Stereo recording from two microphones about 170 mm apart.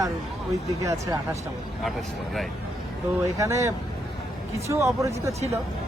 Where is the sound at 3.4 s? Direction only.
20° right (ahead or behind).